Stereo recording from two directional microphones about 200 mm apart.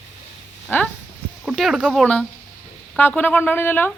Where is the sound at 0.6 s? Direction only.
5° left (ahead or behind).